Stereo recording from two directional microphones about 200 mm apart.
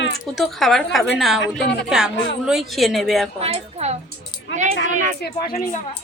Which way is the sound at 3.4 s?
30° right (ahead or behind).